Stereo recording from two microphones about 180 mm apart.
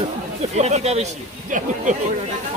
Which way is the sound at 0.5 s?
40° right (ahead or behind).